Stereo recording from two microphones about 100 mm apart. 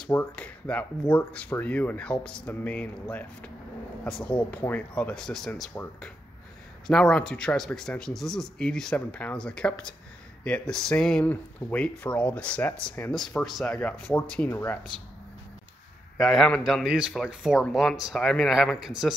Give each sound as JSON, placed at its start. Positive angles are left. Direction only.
{"t": 0.1, "sound": "speech", "side_deg": 15}
{"t": 5.7, "sound": "speech", "side_deg": 25}
{"t": 6.9, "sound": "speech", "side_deg": 5}
{"t": 16.2, "sound": "speech", "side_deg": 0}
{"t": 16.8, "sound": "speech", "side_deg": -5}